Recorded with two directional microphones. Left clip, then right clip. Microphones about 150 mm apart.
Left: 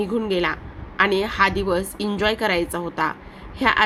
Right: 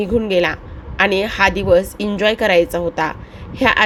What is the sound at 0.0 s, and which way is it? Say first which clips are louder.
A woman's voice: right 6 dB; 20° right (ahead or behind).